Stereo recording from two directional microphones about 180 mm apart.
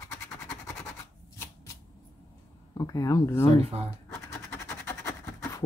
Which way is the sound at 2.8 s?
20° left (ahead or behind).